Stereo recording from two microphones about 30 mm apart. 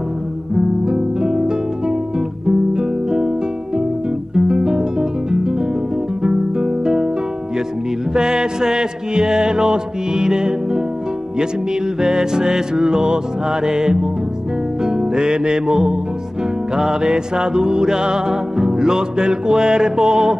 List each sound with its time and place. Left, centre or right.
0.8 s music: right
4.4 s guitar: right
8.1 s music: right
12.0 s music: right